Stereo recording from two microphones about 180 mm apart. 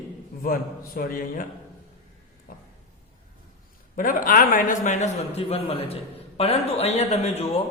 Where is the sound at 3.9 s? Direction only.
50° left (ahead or behind).